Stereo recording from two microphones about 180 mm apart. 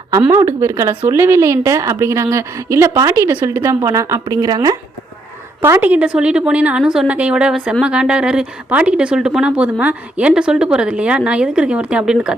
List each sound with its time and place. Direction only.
0.2 s speech: 15° right (ahead or behind)